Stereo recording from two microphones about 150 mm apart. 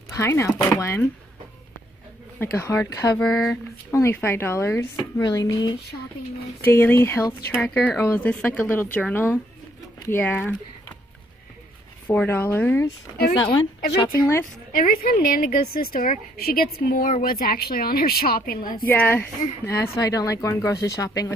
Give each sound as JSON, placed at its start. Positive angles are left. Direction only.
{"t": 0.1, "sound": "speech", "side_deg": 15}
{"t": 2.3, "sound": "speech", "side_deg": 15}
{"t": 3.2, "sound": "speech", "side_deg": 0}
{"t": 3.9, "sound": "speech", "side_deg": 15}
{"t": 5.2, "sound": "speech", "side_deg": 25}
{"t": 6.6, "sound": "speech", "side_deg": 15}
{"t": 12.1, "sound": "speech", "side_deg": 10}
{"t": 13.3, "sound": "speech", "side_deg": 35}
{"t": 13.9, "sound": "speech", "side_deg": 20}
{"t": 14.7, "sound": "a woman's voice", "side_deg": 75}
{"t": 18.9, "sound": "speech", "side_deg": 10}